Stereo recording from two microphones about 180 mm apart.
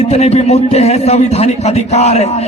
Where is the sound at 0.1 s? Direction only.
35° left (ahead or behind).